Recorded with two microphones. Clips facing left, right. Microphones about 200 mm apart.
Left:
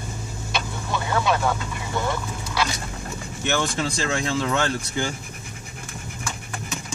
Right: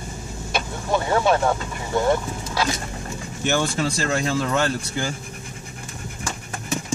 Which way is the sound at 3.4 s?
10° right (ahead or behind).